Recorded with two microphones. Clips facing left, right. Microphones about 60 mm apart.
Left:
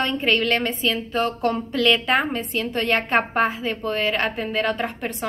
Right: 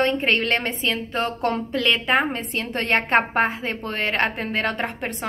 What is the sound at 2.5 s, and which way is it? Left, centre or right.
A woman's voice, right.